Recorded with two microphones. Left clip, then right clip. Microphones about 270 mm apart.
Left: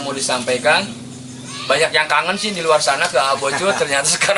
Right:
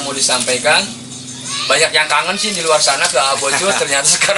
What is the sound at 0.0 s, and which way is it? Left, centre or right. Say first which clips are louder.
Speech: right 4 dB; centre.